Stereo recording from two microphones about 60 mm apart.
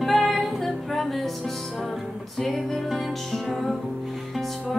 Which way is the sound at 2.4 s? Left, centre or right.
Centre.